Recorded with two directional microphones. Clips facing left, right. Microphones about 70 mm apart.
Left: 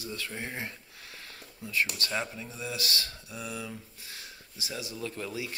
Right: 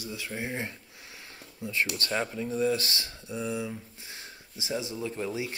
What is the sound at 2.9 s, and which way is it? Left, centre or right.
Speech, right.